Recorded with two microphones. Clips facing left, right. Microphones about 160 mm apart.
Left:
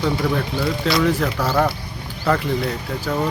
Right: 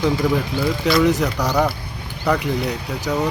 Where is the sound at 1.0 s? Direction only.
20° right (ahead or behind).